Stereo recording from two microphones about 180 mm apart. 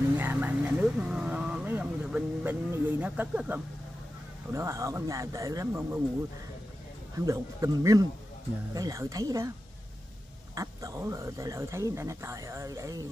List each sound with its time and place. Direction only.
0.2 s speech: 10° right (ahead or behind)
7.2 s speech: 15° right (ahead or behind)
10.5 s speech: 20° right (ahead or behind)